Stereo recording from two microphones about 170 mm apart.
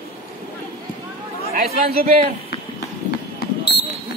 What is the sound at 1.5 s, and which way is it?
Speech, 65° right (ahead or behind).